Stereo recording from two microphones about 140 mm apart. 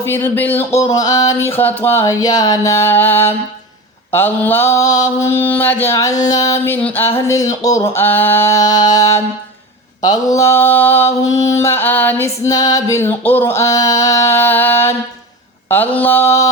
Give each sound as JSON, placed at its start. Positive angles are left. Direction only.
{"t": 0.0, "sound": "mantra", "side_deg": 15}
{"t": 0.8, "sound": "mantra", "side_deg": 25}